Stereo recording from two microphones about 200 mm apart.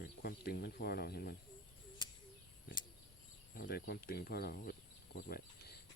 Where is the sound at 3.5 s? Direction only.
50° left (ahead or behind).